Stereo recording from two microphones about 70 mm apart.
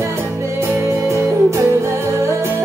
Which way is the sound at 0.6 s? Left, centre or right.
Right.